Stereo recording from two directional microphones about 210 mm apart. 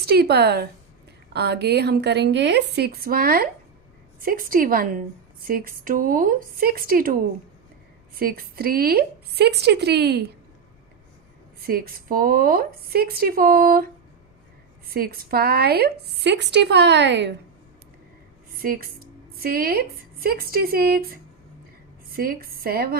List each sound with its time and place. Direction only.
0.0 s a woman's voice: 50° right (ahead or behind)
11.6 s a woman's voice: 45° right (ahead or behind)
14.9 s a woman's voice: 45° right (ahead or behind)
18.6 s a woman's voice: 45° right (ahead or behind)